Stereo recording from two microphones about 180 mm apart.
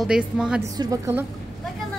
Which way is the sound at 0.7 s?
20° right (ahead or behind).